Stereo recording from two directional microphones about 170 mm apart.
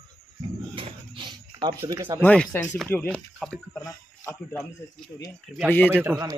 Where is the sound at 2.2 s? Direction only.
10° left (ahead or behind).